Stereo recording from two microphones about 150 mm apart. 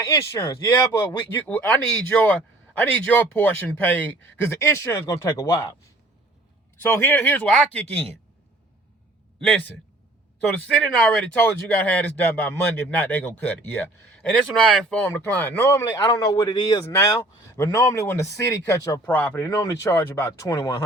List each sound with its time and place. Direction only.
0.3 s speech: 30° left (ahead or behind)
1.0 s speech: 10° left (ahead or behind)
6.8 s speech: 15° left (ahead or behind)
9.4 s speech: 10° left (ahead or behind)
19.4 s speech: 25° left (ahead or behind)